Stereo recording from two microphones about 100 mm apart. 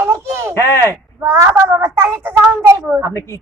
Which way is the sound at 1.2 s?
30° right (ahead or behind).